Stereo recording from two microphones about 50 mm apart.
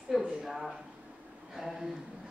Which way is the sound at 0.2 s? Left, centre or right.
Centre.